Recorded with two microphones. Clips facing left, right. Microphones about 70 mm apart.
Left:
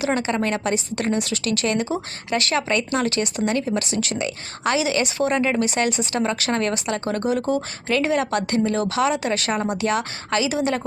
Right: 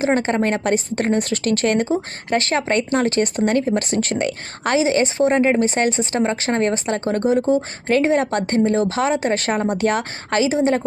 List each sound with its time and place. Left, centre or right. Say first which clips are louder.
0.0 s speech: right 4 dB; right